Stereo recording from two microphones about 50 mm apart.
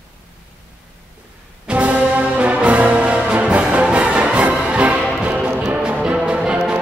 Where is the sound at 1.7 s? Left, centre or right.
Right.